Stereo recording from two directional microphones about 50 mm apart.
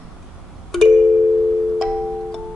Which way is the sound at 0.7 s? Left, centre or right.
Centre.